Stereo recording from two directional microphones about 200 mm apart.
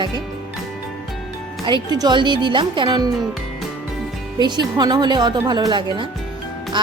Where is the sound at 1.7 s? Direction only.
20° right (ahead or behind).